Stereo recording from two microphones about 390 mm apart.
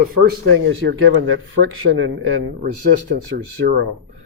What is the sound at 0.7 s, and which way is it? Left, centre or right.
Speech, right.